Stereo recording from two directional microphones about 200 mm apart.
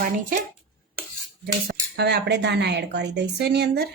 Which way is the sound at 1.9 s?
55° right (ahead or behind).